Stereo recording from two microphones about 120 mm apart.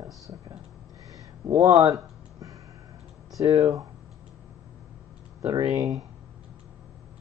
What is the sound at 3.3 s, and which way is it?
Speech, 30° right (ahead or behind).